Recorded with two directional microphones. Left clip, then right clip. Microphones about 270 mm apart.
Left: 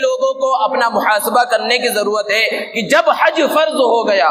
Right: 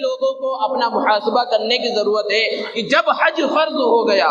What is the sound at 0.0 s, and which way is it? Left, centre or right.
A man's voice, left.